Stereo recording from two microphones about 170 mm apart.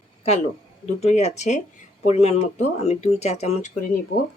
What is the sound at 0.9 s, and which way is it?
Speech, 40° left (ahead or behind).